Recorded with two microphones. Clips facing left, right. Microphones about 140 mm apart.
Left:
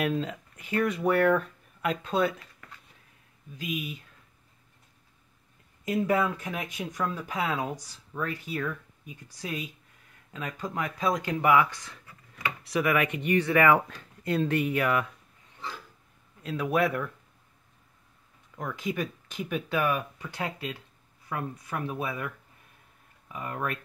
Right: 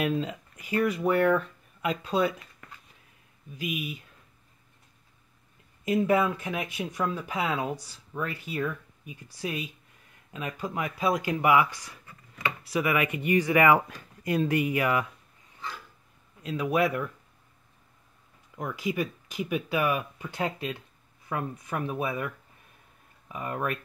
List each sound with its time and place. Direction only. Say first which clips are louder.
0.0 s speech: right 1 dB; 5° right (ahead or behind)
3.5 s speech: right 1 dB; 10° right (ahead or behind)
5.9 s speech: right 2 dB; 15° right (ahead or behind)
16.4 s speech: right 1 dB; centre (ahead or behind)
18.6 s speech: right 2 dB; 10° right (ahead or behind)
20.3 s speech: right 3 dB; 25° right (ahead or behind)